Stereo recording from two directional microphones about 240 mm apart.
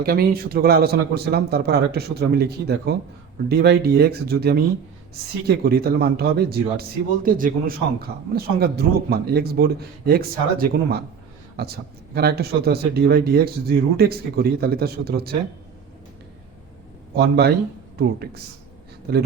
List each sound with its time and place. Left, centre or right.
0.0 s a man's voice: right
17.2 s a man's voice: right